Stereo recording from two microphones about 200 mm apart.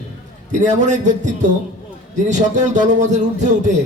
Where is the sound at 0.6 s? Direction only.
35° right (ahead or behind).